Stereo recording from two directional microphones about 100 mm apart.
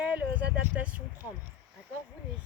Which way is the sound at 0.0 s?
15° right (ahead or behind).